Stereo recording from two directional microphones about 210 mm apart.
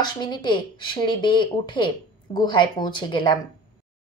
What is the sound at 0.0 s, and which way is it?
A woman's voice, 20° left (ahead or behind).